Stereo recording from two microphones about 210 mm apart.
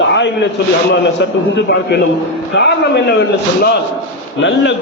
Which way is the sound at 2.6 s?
55° left (ahead or behind).